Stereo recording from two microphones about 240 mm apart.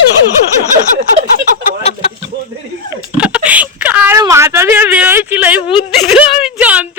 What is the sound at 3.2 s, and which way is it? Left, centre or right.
Speech, centre.